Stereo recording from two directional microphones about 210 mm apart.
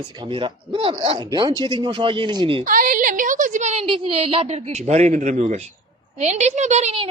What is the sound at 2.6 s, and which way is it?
A woman's voice, 40° right (ahead or behind).